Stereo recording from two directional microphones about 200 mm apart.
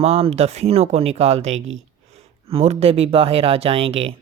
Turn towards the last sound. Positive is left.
turn(degrees=-30)  # may be behind; listen again after turning